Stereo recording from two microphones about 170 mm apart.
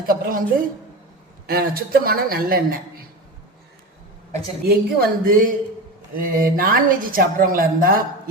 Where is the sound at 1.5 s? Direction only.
60° right (ahead or behind).